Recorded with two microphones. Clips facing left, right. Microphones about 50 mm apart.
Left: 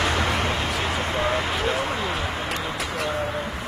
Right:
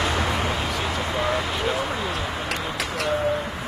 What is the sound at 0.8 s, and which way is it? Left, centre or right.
Vehicle, left.